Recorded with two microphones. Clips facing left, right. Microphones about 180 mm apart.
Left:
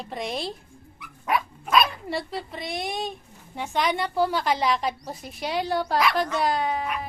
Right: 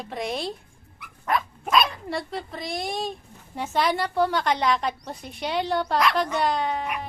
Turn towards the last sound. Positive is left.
turn(degrees=0)  # may be behind; listen again after turning